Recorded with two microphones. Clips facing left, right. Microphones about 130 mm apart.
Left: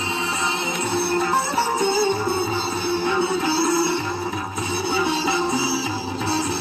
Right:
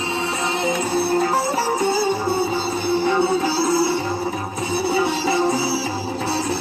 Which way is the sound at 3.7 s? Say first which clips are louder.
Right 2 dB; 25° left (ahead or behind).